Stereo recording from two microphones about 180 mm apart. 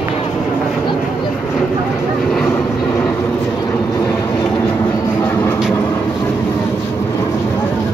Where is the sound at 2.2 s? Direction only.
5° left (ahead or behind).